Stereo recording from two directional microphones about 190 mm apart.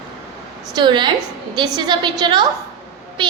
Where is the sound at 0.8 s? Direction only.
25° right (ahead or behind).